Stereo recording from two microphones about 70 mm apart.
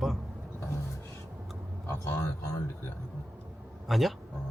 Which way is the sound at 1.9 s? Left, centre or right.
Left.